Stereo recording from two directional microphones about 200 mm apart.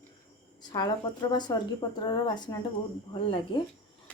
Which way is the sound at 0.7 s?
20° left (ahead or behind).